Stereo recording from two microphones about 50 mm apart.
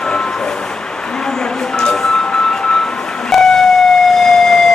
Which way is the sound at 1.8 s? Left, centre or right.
Centre.